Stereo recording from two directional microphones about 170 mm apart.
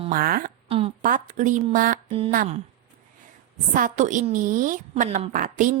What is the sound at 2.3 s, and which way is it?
Speech, 55° right (ahead or behind).